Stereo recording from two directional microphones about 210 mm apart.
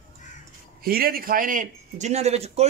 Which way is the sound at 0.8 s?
45° right (ahead or behind).